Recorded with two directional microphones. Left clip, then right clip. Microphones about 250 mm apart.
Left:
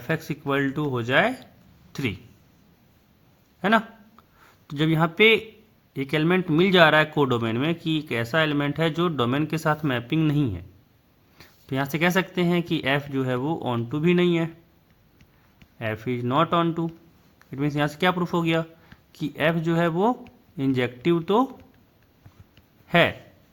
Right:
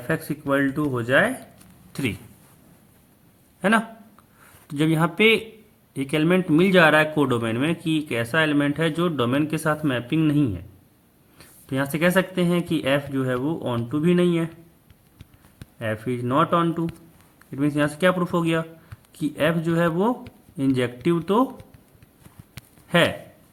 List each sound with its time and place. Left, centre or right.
0.1 s speech: left
1.9 s a sound: left
3.6 s a man's voice: left
15.8 s speech: left
22.9 s speech: left